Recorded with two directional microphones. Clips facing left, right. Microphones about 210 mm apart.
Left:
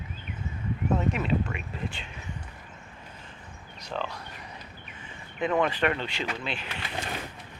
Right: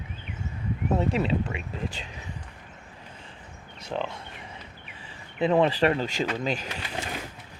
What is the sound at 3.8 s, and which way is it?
Speech, 25° right (ahead or behind).